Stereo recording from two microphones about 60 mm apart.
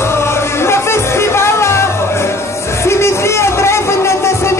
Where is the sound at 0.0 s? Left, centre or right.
Left.